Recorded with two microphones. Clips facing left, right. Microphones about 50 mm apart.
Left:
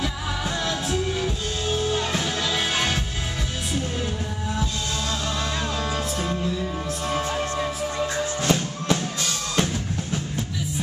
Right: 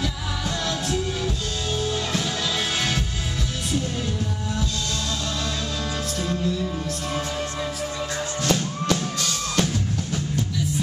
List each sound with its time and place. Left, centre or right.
0.7 s music: centre
6.1 s music: centre
8.4 s drum: centre